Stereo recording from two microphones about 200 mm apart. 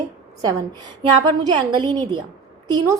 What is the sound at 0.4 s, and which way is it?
A woman's voice, 20° right (ahead or behind).